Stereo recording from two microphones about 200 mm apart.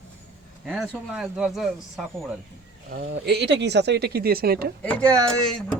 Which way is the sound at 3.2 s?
55° right (ahead or behind).